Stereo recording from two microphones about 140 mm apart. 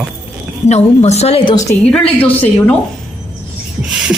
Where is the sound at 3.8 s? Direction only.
5° right (ahead or behind).